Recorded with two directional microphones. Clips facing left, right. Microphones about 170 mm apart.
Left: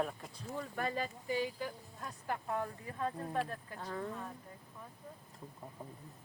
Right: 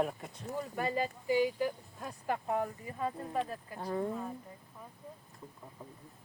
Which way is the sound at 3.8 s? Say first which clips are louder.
Right 7 dB; 25° right (ahead or behind).